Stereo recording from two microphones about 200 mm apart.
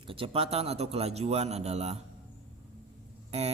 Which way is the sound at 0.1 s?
30° right (ahead or behind).